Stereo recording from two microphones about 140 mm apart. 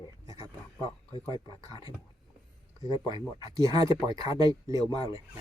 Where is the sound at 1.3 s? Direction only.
30° left (ahead or behind).